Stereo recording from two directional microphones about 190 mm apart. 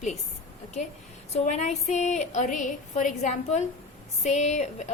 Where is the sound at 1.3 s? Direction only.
35° left (ahead or behind).